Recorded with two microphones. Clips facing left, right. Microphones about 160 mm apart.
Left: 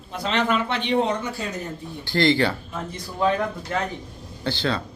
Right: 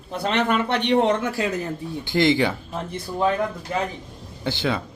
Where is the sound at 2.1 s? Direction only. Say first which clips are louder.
Right 1 dB; 15° right (ahead or behind).